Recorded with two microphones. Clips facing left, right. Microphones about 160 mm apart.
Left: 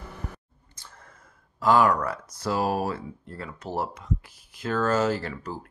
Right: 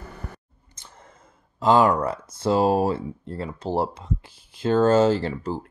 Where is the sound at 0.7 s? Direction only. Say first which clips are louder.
Right 2 dB; 20° right (ahead or behind).